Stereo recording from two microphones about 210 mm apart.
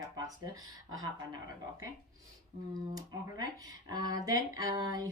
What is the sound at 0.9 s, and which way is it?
Speech, 20° right (ahead or behind).